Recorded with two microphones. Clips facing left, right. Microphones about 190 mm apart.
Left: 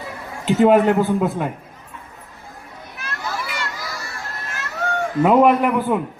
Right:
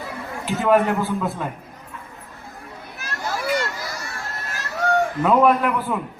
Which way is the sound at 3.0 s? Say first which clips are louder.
Right 1 dB; 45° right (ahead or behind).